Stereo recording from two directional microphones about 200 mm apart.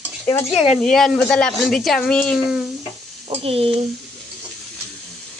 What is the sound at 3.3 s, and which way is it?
Stir, 30° right (ahead or behind).